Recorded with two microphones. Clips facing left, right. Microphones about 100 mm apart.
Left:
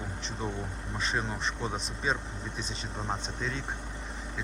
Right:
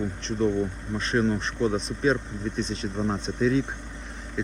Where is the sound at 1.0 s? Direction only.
5° left (ahead or behind).